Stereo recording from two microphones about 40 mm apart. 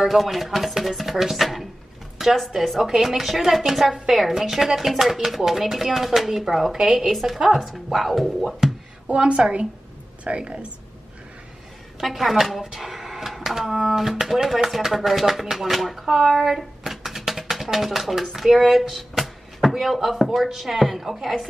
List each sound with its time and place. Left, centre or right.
0.0 s speech: centre
9.0 s a woman's voice: right
12.0 s speech: centre
18.7 s a sound: centre
20.2 s speech: centre